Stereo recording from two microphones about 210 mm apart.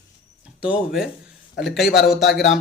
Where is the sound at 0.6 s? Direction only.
5° right (ahead or behind).